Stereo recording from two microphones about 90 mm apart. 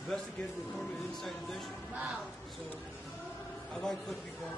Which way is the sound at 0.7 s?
Centre (ahead or behind).